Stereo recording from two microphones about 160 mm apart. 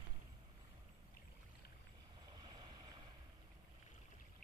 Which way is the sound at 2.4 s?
25° right (ahead or behind).